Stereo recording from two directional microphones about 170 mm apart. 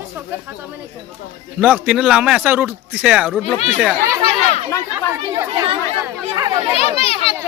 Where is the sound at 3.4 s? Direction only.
35° left (ahead or behind).